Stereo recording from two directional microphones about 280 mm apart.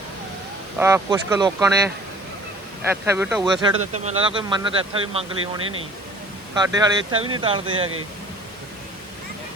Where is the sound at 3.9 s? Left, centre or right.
Right.